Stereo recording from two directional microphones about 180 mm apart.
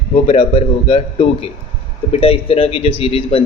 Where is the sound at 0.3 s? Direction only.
30° left (ahead or behind).